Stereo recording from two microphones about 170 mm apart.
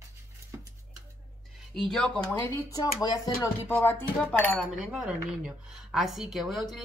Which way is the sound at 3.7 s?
10° left (ahead or behind).